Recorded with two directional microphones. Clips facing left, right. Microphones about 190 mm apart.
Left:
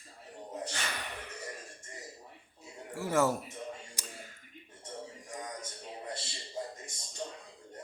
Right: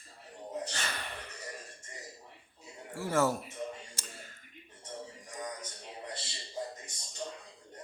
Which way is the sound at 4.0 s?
15° left (ahead or behind).